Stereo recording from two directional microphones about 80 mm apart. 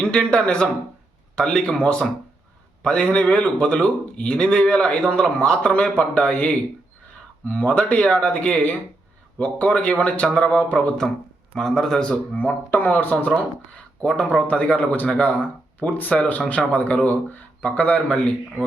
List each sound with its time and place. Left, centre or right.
0.0 s speech: centre